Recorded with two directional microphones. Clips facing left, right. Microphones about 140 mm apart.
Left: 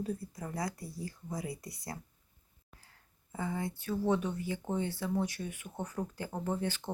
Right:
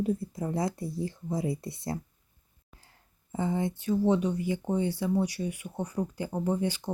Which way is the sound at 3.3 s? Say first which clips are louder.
Right 7 dB; 20° right (ahead or behind).